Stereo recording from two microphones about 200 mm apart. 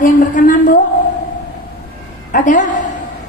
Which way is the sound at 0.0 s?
40° left (ahead or behind).